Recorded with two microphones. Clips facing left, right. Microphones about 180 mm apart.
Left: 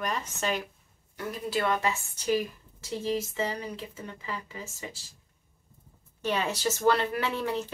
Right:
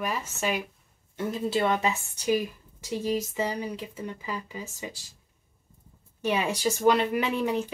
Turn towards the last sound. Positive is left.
turn(degrees=-15)  # may be behind; listen again after turning